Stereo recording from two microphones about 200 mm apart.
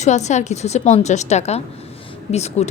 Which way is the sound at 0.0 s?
35° left (ahead or behind).